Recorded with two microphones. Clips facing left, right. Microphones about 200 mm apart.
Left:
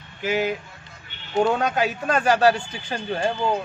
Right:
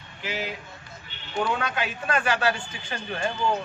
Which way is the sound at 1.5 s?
40° left (ahead or behind).